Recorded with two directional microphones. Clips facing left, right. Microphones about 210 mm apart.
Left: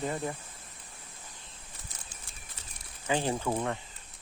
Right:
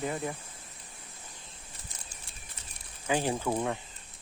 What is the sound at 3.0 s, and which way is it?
Speech, 10° right (ahead or behind).